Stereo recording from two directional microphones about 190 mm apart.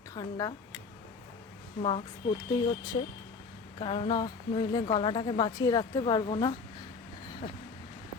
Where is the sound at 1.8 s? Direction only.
30° left (ahead or behind).